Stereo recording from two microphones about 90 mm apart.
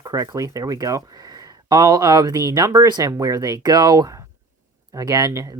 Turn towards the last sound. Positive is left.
turn(degrees=-40)  # may be behind; listen again after turning